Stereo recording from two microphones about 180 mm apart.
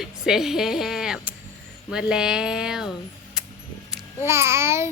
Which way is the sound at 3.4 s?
5° right (ahead or behind).